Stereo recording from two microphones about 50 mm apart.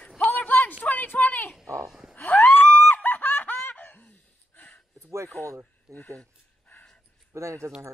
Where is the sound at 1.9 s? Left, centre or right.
Centre.